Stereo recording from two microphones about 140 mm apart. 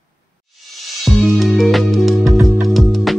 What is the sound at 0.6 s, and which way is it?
Music, centre (ahead or behind).